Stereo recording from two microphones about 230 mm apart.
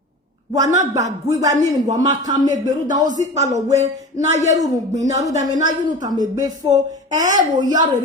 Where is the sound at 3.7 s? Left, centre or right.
Right.